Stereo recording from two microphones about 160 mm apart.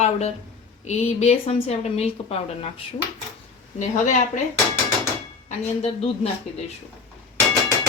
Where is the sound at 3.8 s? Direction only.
50° left (ahead or behind).